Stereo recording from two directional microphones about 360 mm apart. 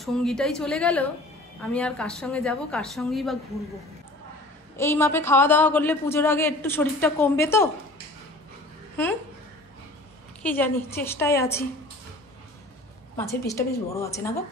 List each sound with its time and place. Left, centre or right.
0.0 s a woman's voice: centre
4.7 s a man's voice: centre
10.4 s a woman's voice: centre
13.1 s a man's voice: centre